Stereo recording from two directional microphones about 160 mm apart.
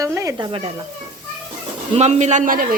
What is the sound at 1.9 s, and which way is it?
Speech, 45° right (ahead or behind).